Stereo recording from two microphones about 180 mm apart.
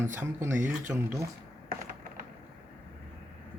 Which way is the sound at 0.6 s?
45° right (ahead or behind).